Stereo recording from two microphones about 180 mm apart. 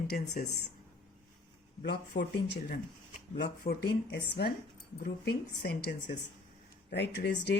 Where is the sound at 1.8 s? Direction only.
70° left (ahead or behind).